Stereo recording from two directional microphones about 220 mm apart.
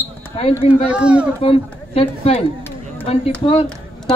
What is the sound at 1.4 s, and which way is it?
Speech, 25° left (ahead or behind).